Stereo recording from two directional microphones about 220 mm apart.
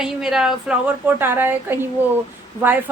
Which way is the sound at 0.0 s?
Centre (ahead or behind).